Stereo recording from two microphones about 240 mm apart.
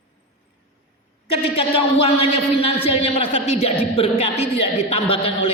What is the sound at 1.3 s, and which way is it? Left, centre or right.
Speech, left.